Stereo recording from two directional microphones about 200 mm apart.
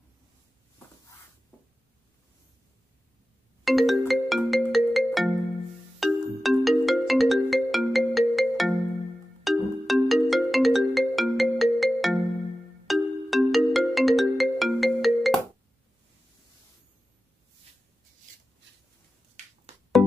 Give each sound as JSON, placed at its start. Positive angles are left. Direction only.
{"t": 3.6, "sound": "music", "side_deg": 0}
{"t": 4.1, "sound": "ringtone", "side_deg": 0}
{"t": 19.7, "sound": "music", "side_deg": -35}